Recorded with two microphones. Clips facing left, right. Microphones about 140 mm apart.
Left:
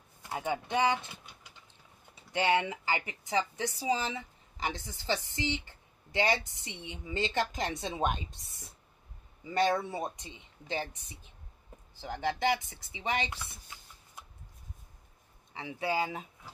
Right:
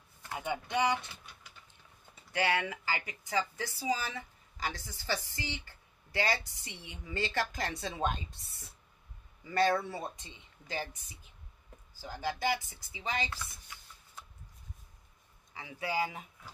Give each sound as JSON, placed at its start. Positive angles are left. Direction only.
{"t": 0.3, "sound": "speech", "side_deg": 20}
{"t": 11.9, "sound": "speech", "side_deg": 25}
{"t": 15.5, "sound": "speech", "side_deg": 25}